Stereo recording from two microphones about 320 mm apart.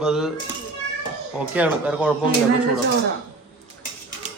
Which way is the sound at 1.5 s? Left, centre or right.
Centre.